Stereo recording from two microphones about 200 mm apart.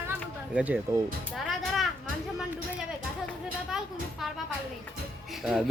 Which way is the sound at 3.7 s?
Centre (ahead or behind).